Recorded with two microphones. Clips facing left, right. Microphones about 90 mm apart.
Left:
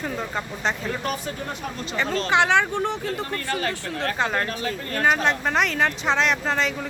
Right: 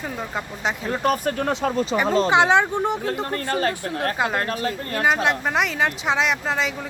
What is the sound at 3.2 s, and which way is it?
Speech, 40° right (ahead or behind).